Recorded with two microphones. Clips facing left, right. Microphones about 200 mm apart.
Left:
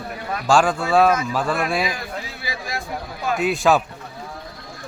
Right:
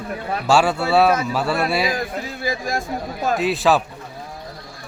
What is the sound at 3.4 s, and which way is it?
Speech, centre (ahead or behind).